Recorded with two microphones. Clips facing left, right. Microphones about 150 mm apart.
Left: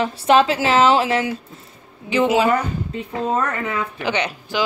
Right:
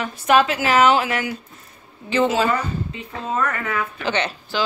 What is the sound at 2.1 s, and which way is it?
Speech, 15° left (ahead or behind).